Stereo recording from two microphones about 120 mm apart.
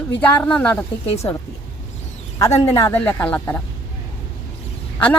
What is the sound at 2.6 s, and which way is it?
Speech, 30° left (ahead or behind).